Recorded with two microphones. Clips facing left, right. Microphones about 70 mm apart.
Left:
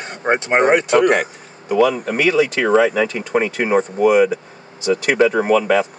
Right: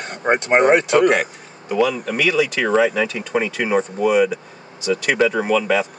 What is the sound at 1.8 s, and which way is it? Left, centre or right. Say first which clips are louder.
Speech: left 3 dB; left.